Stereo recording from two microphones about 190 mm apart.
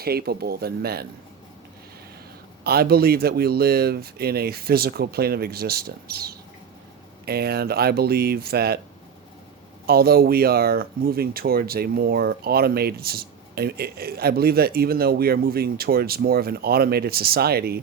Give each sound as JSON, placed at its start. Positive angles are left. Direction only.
{"t": 0.0, "sound": "speech", "side_deg": -55}
{"t": 2.6, "sound": "speech", "side_deg": -55}
{"t": 9.8, "sound": "speech", "side_deg": -55}